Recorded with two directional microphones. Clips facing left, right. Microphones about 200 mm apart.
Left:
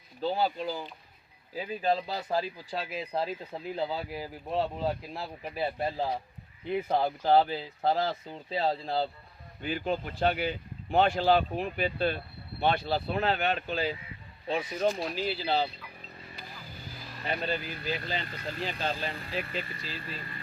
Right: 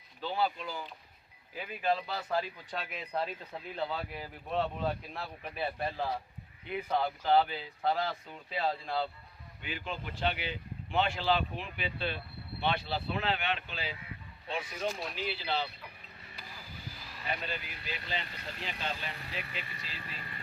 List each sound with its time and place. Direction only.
0.2 s speech: 35° left (ahead or behind)
17.4 s speech: 35° left (ahead or behind)